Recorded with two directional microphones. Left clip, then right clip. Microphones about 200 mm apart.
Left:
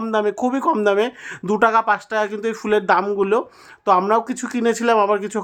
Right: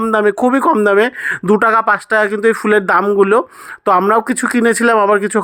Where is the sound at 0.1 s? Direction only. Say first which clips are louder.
Right 6 dB; 20° right (ahead or behind).